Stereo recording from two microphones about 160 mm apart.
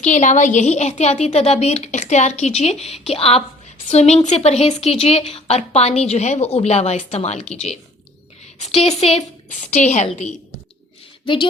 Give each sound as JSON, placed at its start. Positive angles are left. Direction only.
{"t": 0.0, "sound": "a woman's voice", "side_deg": 50}
{"t": 8.5, "sound": "a woman's voice", "side_deg": 45}